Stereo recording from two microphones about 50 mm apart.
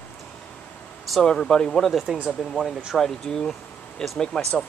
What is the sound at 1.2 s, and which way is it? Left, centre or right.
Speech, centre.